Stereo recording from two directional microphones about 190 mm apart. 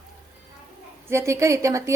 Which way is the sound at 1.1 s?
15° right (ahead or behind).